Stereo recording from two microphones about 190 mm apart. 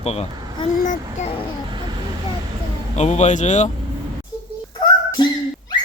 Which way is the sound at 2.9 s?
40° left (ahead or behind).